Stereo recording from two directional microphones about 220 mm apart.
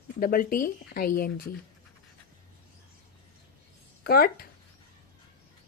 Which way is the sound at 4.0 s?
45° left (ahead or behind).